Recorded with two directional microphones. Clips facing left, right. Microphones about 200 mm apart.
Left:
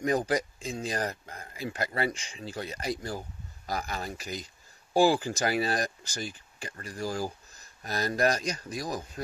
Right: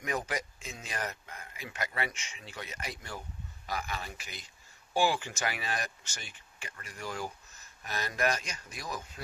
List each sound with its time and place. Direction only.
0.0 s speech: 35° left (ahead or behind)